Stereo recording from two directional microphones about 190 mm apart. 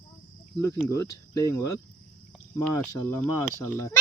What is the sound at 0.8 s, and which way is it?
A child's voice, 15° left (ahead or behind).